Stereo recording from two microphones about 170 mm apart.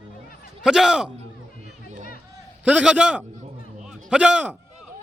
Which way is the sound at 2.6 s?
5° right (ahead or behind).